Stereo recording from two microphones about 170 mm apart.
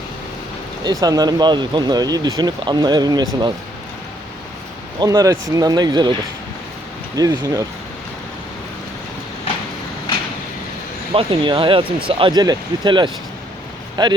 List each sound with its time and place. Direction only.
0.9 s speech: 20° right (ahead or behind)
4.9 s speech: 20° right (ahead or behind)
7.2 s speech: 20° right (ahead or behind)
11.1 s speech: 30° right (ahead or behind)